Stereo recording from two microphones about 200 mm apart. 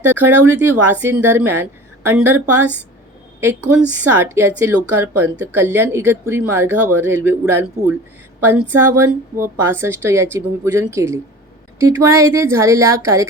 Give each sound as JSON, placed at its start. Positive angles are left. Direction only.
{"t": 0.0, "sound": "speech", "side_deg": -10}